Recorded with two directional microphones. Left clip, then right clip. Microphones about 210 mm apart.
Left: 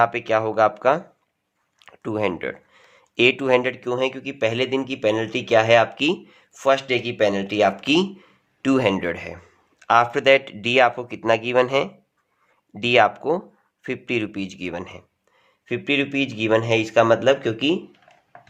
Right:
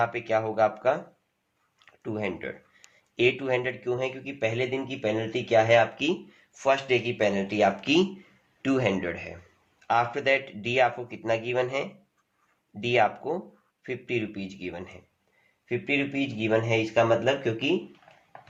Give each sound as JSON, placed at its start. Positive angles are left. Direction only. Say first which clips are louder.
{"t": 0.0, "sound": "speech", "louder": "left 7 dB", "side_deg": 40}